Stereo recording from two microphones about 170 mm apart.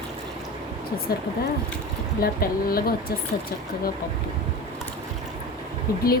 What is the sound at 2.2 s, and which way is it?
Speech, 60° left (ahead or behind).